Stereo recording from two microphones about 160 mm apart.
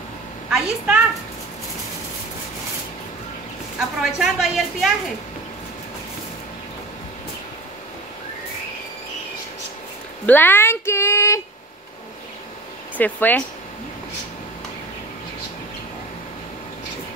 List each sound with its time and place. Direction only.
0.5 s a woman's voice: 5° right (ahead or behind)
4.0 s a woman's voice: centre (ahead or behind)
10.2 s speech: 10° left (ahead or behind)
12.9 s speech: 10° left (ahead or behind)